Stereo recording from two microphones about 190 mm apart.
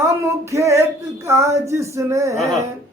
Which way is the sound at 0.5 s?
15° right (ahead or behind).